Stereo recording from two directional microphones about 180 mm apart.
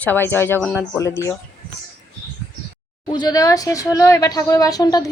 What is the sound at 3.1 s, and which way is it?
Speech, 25° left (ahead or behind).